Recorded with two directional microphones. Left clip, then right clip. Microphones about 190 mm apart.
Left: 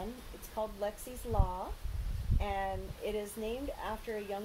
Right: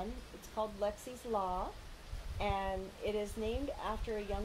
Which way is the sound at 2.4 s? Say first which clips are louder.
Even; 15° right (ahead or behind).